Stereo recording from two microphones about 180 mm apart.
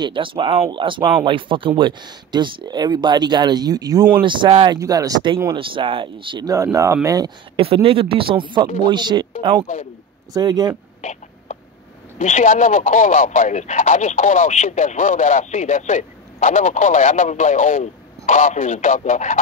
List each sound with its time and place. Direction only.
0.0 s speech: 25° right (ahead or behind)
11.0 s a sound: 40° left (ahead or behind)
12.2 s a man's voice: 40° left (ahead or behind)